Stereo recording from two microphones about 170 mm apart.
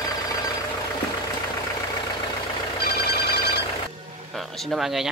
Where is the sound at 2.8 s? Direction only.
70° left (ahead or behind).